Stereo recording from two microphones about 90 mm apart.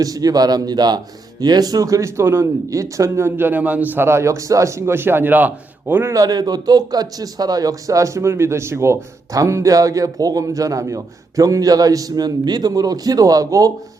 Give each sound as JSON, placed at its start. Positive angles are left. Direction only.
{"t": 0.0, "sound": "speech", "side_deg": -45}
{"t": 6.1, "sound": "speech", "side_deg": -45}